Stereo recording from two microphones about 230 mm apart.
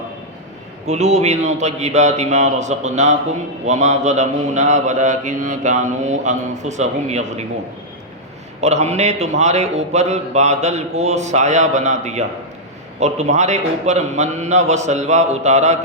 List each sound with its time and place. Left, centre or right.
0.9 s a man's voice: right
3.7 s mantra: right
8.6 s a man's voice: right